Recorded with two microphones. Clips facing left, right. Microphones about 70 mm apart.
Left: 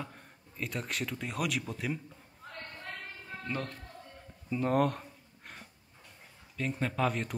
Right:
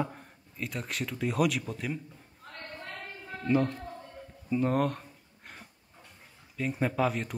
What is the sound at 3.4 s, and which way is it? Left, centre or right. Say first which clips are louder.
Speech: right 11 dB; centre.